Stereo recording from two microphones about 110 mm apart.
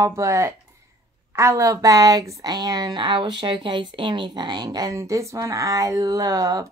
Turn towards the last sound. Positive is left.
turn(degrees=-35)  # may be behind; listen again after turning